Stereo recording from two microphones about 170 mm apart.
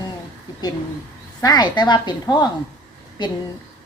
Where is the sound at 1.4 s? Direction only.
25° left (ahead or behind).